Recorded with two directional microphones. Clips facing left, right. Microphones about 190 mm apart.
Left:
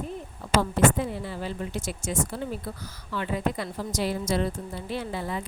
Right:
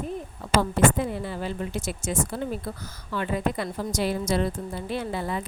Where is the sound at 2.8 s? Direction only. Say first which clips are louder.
Right 2 dB; 45° right (ahead or behind).